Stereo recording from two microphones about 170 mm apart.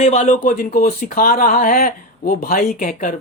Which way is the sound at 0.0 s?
40° left (ahead or behind).